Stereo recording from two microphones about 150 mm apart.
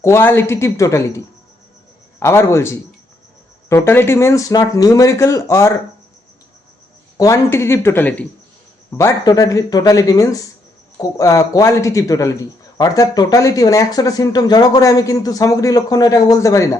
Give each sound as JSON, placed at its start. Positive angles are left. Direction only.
{"t": 0.0, "sound": "a man's voice", "side_deg": 15}
{"t": 7.2, "sound": "a man's voice", "side_deg": 20}